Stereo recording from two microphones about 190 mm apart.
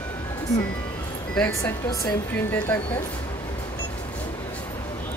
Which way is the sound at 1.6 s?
15° left (ahead or behind).